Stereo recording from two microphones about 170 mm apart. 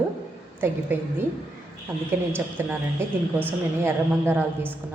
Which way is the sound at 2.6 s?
10° right (ahead or behind).